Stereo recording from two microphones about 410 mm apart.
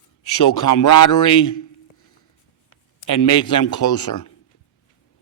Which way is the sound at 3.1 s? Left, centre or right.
Left.